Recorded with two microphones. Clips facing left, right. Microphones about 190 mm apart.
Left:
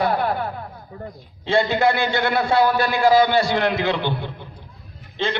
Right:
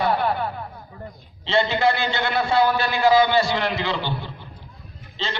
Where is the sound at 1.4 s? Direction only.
50° left (ahead or behind).